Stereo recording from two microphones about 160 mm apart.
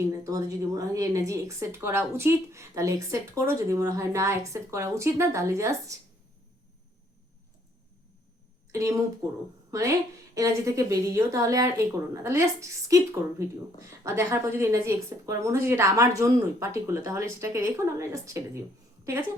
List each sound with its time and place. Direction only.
0.1 s speech: 20° right (ahead or behind)
8.7 s speech: 20° right (ahead or behind)